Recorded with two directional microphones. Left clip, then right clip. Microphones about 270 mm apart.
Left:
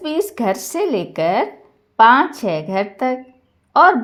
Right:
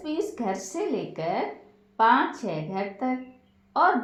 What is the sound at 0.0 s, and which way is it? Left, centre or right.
A woman's voice, left.